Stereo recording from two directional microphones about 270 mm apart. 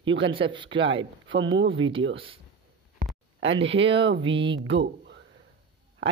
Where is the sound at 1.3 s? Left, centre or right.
Right.